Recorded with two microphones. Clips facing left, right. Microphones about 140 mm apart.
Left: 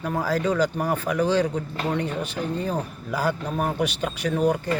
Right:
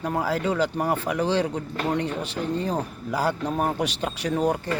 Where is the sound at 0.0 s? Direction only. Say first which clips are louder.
Left 1 dB; 20° right (ahead or behind).